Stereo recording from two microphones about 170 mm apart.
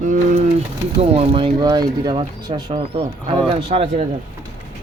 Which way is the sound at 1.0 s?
35° right (ahead or behind).